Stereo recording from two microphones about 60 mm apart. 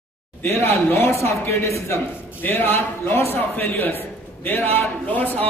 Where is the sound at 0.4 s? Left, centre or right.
Left.